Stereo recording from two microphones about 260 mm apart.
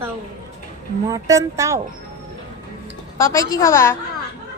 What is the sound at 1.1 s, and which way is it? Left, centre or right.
Speech, centre.